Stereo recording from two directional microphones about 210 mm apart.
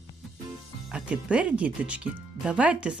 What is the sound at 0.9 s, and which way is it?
Speech, 5° right (ahead or behind).